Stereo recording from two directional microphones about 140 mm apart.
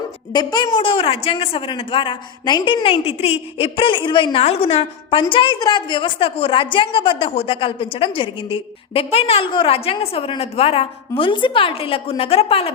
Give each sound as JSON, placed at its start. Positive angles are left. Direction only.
{"t": 0.3, "sound": "a woman's voice", "side_deg": 30}